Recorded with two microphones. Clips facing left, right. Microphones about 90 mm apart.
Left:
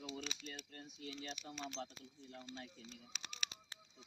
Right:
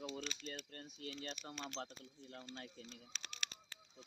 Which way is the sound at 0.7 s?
50° right (ahead or behind).